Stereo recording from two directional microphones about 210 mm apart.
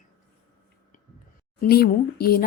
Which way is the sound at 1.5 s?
45° left (ahead or behind).